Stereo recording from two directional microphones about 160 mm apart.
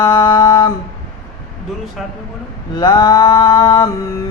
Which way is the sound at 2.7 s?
25° left (ahead or behind).